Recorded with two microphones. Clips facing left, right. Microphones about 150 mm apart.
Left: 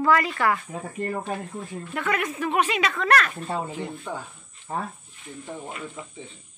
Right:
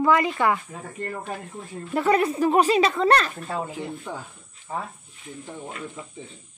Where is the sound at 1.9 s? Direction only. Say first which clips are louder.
Right 7 dB; 30° right (ahead or behind).